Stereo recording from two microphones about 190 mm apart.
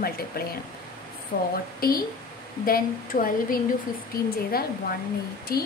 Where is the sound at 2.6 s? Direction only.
50° left (ahead or behind).